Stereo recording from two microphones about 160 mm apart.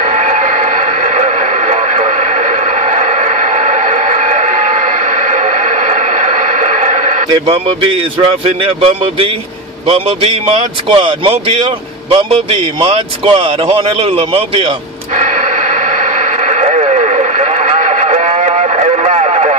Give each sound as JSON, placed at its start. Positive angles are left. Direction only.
{"t": 0.0, "sound": "radio", "side_deg": -50}
{"t": 7.3, "sound": "a man's voice", "side_deg": -35}
{"t": 15.1, "sound": "radio", "side_deg": -50}